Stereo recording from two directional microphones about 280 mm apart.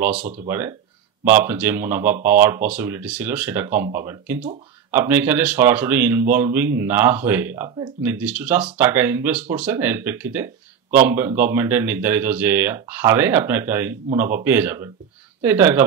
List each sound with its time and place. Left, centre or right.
0.1 s speech: right
0.5 s a man's voice: centre